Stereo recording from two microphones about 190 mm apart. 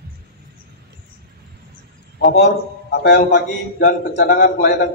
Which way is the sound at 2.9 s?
55° left (ahead or behind).